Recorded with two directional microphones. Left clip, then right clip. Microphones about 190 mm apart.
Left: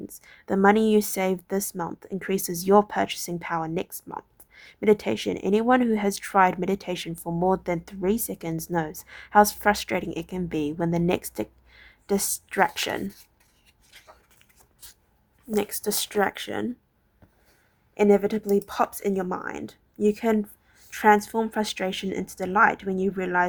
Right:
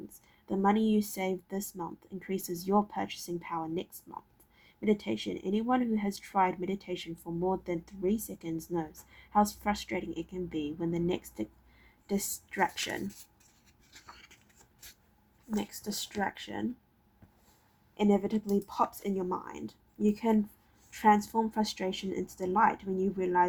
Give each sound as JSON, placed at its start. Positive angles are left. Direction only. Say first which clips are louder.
{"t": 0.2, "sound": "a woman's voice", "louder": "left 10 dB", "side_deg": 45}
{"t": 15.5, "sound": "speech", "louder": "left 11 dB", "side_deg": 40}
{"t": 17.9, "sound": "speech", "louder": "left 9 dB", "side_deg": 35}